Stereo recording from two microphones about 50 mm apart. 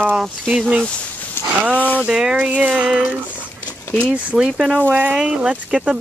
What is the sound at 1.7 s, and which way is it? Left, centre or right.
Speech, left.